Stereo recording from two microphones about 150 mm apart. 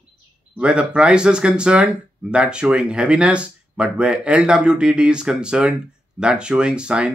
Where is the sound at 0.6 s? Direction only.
5° right (ahead or behind).